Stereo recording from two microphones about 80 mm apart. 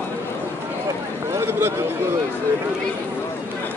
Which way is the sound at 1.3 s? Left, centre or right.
Right.